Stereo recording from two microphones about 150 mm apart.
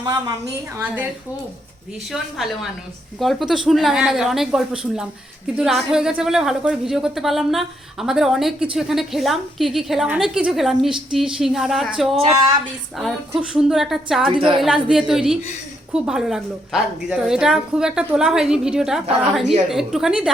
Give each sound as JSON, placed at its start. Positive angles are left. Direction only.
{"t": 0.0, "sound": "a woman's voice", "side_deg": -25}
{"t": 2.0, "sound": "a woman's voice", "side_deg": 0}
{"t": 12.1, "sound": "speech", "side_deg": -40}
{"t": 13.0, "sound": "a woman's voice", "side_deg": 0}